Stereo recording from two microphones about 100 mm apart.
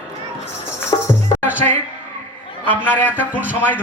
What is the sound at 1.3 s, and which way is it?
Music, 15° right (ahead or behind).